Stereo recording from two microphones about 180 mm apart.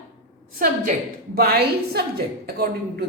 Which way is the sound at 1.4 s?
60° right (ahead or behind).